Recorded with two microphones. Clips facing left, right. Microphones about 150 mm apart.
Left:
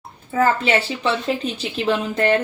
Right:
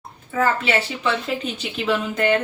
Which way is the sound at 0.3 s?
35° left (ahead or behind).